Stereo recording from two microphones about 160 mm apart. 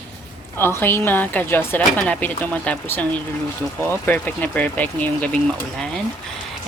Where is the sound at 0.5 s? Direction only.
15° left (ahead or behind).